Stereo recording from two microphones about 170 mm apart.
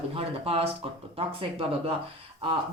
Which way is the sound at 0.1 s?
35° right (ahead or behind).